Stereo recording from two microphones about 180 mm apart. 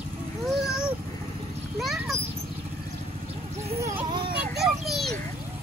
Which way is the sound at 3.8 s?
15° right (ahead or behind).